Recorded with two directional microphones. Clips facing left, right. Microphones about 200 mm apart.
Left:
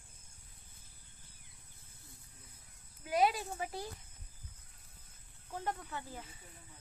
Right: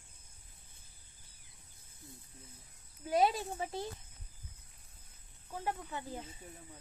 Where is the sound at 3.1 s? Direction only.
25° right (ahead or behind).